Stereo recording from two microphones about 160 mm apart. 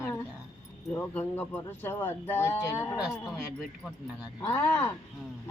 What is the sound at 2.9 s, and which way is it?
Speech, 5° right (ahead or behind).